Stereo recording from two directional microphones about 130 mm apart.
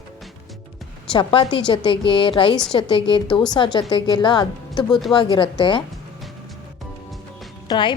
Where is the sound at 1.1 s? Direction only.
40° left (ahead or behind).